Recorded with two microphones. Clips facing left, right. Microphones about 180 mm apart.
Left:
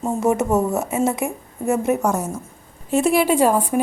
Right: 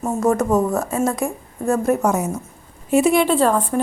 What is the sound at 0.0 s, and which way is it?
Speech, 25° left (ahead or behind).